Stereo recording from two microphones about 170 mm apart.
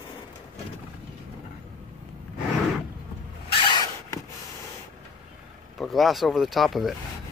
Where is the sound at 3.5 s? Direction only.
25° left (ahead or behind).